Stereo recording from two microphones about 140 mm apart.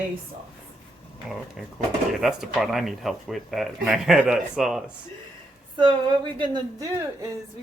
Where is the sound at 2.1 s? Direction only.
Centre (ahead or behind).